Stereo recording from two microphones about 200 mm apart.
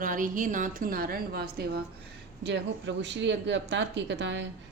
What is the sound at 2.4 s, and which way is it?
Speech, 60° right (ahead or behind).